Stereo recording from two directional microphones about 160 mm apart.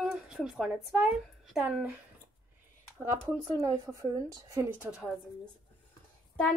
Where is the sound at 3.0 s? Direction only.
15° right (ahead or behind).